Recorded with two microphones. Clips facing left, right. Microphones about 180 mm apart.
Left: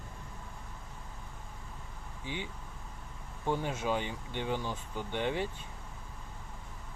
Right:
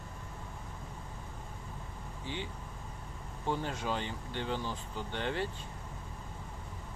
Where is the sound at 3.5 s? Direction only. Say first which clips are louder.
Left 2 dB; 10° left (ahead or behind).